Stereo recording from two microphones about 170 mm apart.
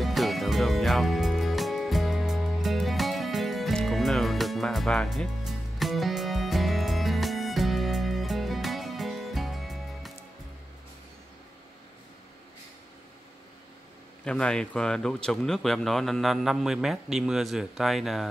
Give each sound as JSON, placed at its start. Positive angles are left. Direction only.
{"t": 0.0, "sound": "music", "side_deg": 0}
{"t": 14.2, "sound": "speech", "side_deg": 5}